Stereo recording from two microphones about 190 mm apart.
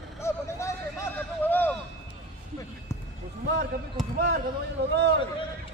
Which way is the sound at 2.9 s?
15° left (ahead or behind).